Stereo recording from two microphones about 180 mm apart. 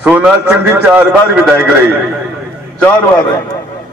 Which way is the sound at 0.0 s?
5° right (ahead or behind).